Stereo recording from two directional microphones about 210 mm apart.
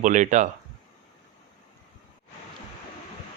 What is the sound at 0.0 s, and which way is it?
Speech, 35° right (ahead or behind).